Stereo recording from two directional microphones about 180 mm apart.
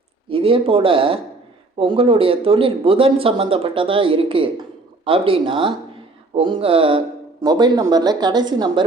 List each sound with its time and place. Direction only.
0.3 s speech: 30° right (ahead or behind)